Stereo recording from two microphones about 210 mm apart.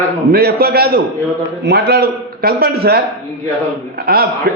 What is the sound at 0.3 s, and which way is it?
A man's voice, 45° right (ahead or behind).